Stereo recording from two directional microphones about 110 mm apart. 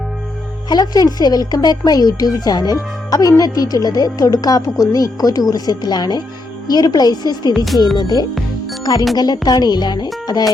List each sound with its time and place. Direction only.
0.7 s speech: 35° left (ahead or behind)
7.5 s speech: centre (ahead or behind)
7.9 s speech: 40° left (ahead or behind)